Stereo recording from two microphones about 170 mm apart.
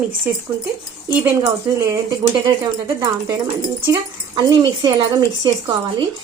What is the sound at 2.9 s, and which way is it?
Speech, 20° right (ahead or behind).